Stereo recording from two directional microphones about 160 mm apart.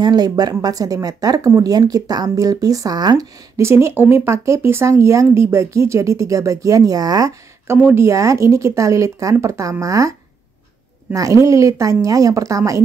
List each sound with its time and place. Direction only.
0.0 s speech: 25° right (ahead or behind)